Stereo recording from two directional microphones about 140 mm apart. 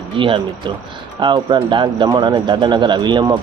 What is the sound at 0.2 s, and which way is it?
Speech, 40° right (ahead or behind).